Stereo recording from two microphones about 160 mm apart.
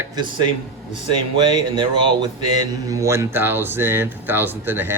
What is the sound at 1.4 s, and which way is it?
Speech, 30° right (ahead or behind).